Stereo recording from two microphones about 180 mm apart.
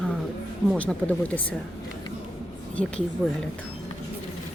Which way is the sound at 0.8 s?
5° left (ahead or behind).